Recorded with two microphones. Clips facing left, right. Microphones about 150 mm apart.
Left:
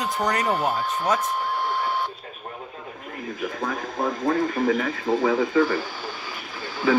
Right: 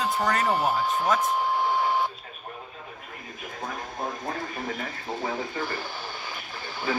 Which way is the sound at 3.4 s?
90° left.